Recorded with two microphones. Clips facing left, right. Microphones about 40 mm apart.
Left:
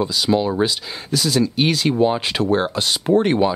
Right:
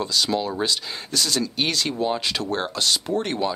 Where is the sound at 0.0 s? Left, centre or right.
Centre.